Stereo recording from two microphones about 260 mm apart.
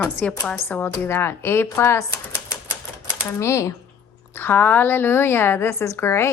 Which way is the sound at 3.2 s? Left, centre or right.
Centre.